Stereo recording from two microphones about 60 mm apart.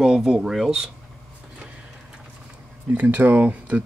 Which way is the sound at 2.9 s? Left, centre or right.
Right.